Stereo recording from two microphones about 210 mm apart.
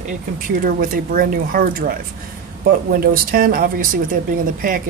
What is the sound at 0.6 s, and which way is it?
Speech, 40° right (ahead or behind).